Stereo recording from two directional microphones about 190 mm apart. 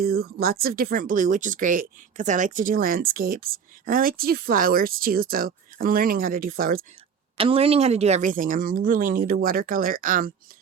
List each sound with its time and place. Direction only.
0.0 s speech: 55° right (ahead or behind)
7.3 s speech: 30° right (ahead or behind); by 10.3 s 45° right (ahead or behind)